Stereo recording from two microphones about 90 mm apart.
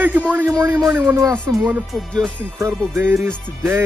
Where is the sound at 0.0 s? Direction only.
15° right (ahead or behind).